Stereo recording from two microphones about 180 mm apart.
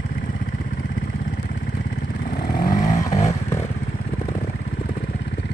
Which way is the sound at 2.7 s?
45° left (ahead or behind).